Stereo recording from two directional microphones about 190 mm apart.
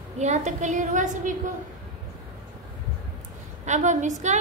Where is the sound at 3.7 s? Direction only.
40° right (ahead or behind).